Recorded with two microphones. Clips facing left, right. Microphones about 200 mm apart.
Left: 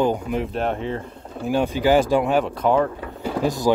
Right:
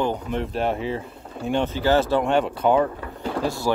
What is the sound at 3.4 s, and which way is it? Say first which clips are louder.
Speech: left 5 dB; 15° left (ahead or behind).